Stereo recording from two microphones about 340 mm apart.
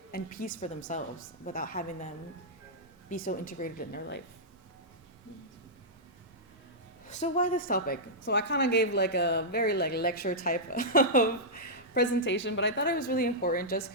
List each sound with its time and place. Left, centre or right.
0.1 s a woman's voice: left
3.1 s a woman's voice: left
7.1 s a woman's voice: left